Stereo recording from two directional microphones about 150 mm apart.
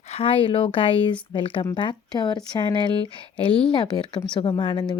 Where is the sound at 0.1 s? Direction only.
40° left (ahead or behind).